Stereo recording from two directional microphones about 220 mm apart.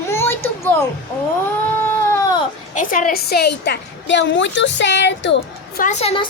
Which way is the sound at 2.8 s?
35° left (ahead or behind).